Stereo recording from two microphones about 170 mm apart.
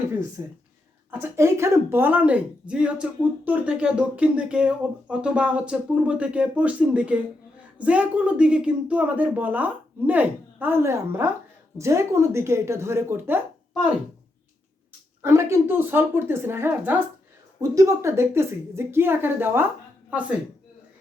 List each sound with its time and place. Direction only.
0.4 s speech: 20° right (ahead or behind)
15.2 s speech: 15° right (ahead or behind)